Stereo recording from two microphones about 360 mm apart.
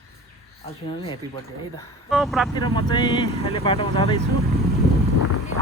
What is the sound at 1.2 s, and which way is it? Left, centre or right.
Speech, centre.